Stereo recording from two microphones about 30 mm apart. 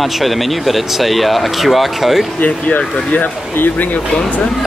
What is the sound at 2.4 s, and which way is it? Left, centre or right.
Speech, left.